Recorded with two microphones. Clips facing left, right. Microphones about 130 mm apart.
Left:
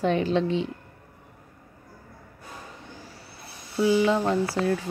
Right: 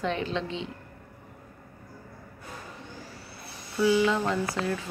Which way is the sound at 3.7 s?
30° left (ahead or behind).